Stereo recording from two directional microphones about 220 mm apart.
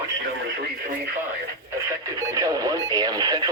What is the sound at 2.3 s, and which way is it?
Radio, 15° right (ahead or behind).